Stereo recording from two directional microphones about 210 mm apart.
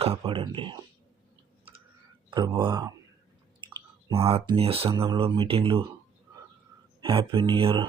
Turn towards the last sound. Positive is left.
turn(degrees=-25)  # may be behind; listen again after turning